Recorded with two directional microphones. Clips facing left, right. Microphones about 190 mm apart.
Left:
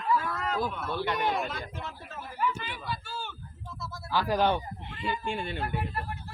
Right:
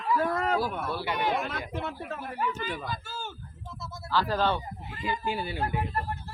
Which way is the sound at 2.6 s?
45° right (ahead or behind).